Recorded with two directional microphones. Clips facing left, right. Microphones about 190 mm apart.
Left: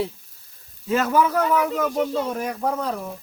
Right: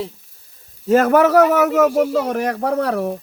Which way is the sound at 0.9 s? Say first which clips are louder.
Right 7 dB; 55° right (ahead or behind).